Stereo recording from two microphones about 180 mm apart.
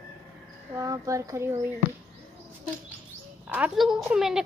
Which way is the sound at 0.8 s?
20° right (ahead or behind).